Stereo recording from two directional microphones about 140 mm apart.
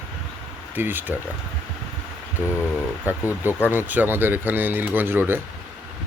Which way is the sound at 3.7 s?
10° right (ahead or behind).